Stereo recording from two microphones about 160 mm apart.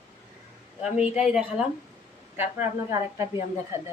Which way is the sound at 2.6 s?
15° right (ahead or behind).